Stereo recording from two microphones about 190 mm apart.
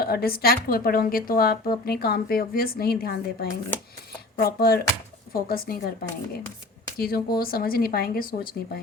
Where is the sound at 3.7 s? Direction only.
10° left (ahead or behind).